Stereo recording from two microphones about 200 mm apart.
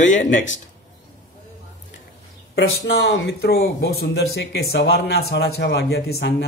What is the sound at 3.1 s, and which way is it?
A man's voice, 60° left (ahead or behind).